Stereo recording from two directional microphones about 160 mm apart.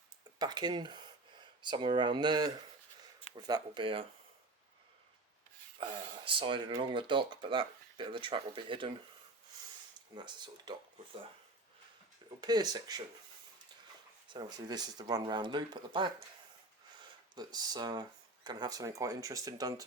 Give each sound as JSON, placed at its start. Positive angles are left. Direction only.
{"t": 0.3, "sound": "speech", "side_deg": -25}
{"t": 5.8, "sound": "speech", "side_deg": -35}
{"t": 10.2, "sound": "speech", "side_deg": -30}
{"t": 12.4, "sound": "speech", "side_deg": -25}
{"t": 14.3, "sound": "speech", "side_deg": -25}